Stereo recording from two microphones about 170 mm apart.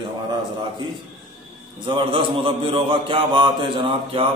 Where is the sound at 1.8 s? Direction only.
30° right (ahead or behind).